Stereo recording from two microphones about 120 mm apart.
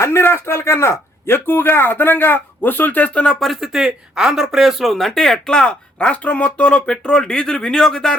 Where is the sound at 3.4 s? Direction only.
Centre (ahead or behind).